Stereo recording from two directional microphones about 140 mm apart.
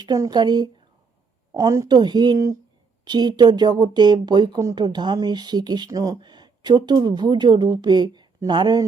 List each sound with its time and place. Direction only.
0.0 s a woman's voice: 30° right (ahead or behind)